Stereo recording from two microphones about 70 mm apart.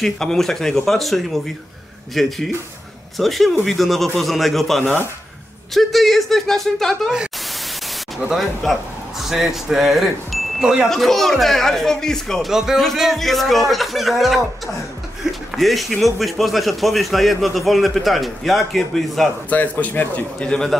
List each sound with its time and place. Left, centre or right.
0.0 s a man's voice: centre
8.3 s a man's voice: centre
9.2 s wind chime: centre
10.9 s a man's voice: centre
12.4 s a man's voice: centre
15.5 s a man's voice: centre
19.5 s a man's voice: left
20.4 s a man's voice: centre